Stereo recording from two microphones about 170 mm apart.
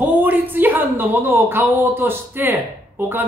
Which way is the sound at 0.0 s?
10° right (ahead or behind).